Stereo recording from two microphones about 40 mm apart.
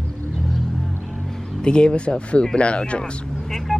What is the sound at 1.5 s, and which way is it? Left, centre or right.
Speech, left.